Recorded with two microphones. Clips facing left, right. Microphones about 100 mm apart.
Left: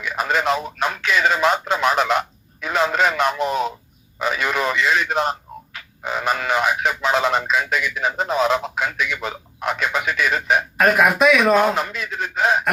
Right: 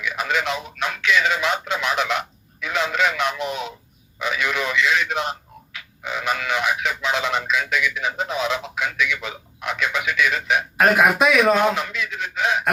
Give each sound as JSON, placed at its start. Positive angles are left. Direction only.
{"t": 0.0, "sound": "speech", "side_deg": 40}
{"t": 10.8, "sound": "speech", "side_deg": 0}
{"t": 11.5, "sound": "speech", "side_deg": 40}